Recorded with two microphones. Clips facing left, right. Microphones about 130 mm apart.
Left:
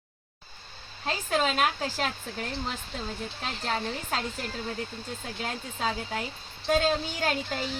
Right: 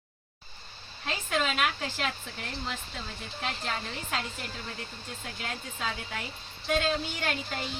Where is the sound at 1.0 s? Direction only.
35° left (ahead or behind).